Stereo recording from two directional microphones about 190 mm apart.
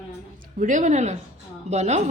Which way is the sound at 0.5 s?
40° right (ahead or behind).